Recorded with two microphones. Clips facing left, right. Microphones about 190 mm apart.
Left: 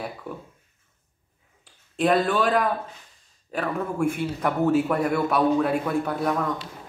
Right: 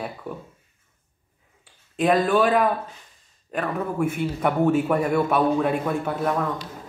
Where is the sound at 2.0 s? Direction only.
Centre (ahead or behind).